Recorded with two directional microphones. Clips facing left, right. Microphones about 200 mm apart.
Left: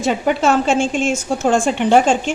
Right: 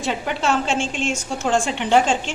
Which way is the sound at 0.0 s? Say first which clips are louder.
Left 7 dB; 45° left (ahead or behind).